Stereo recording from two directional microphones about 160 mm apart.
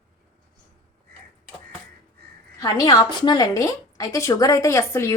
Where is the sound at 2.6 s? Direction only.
20° left (ahead or behind).